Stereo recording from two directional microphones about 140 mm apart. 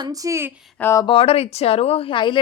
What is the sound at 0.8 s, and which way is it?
Speech, 15° left (ahead or behind).